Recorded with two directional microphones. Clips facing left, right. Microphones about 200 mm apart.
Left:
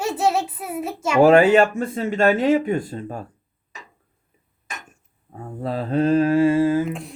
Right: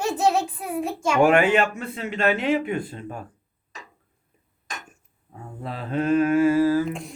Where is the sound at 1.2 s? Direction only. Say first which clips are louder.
Left 5 dB; 35° left (ahead or behind).